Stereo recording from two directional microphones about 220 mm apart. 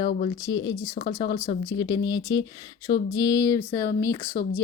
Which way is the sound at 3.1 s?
15° left (ahead or behind).